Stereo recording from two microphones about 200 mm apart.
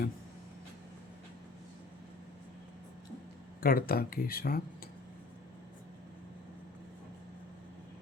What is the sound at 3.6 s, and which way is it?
Speech, 45° left (ahead or behind).